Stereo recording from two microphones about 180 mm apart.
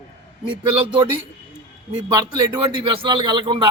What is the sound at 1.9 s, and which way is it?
A man's voice, 25° right (ahead or behind).